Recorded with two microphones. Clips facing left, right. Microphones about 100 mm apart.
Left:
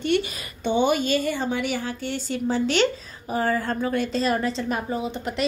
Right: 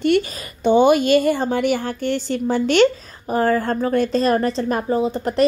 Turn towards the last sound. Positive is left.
turn(degrees=-40)  # may be behind; listen again after turning